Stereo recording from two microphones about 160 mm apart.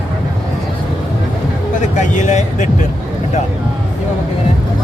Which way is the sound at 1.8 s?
50° left (ahead or behind).